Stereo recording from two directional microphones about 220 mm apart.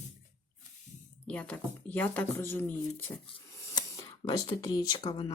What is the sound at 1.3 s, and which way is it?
Speech, 5° left (ahead or behind).